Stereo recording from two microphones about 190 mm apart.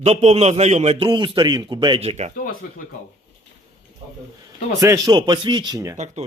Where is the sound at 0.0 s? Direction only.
35° right (ahead or behind).